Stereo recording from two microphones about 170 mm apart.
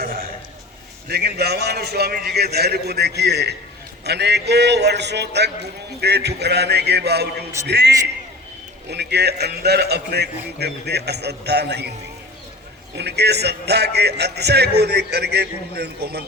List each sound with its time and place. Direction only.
0.0 s a sound: 60° right (ahead or behind)
1.0 s a man's voice: 70° right (ahead or behind)
13.0 s speech: 75° right (ahead or behind)